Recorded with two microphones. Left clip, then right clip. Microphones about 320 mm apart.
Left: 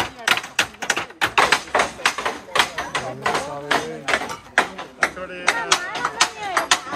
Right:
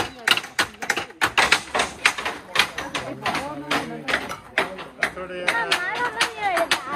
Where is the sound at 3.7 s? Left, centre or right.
Left.